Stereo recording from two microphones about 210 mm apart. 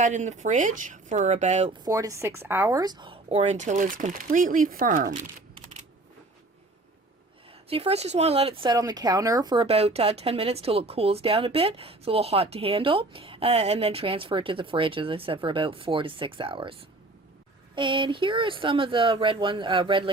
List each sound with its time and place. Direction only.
0.0 s speech: 35° right (ahead or behind)
1.8 s speech: 15° right (ahead or behind); by 5.1 s 40° right (ahead or behind)
7.7 s speech: 30° right (ahead or behind)
17.7 s speech: 25° right (ahead or behind)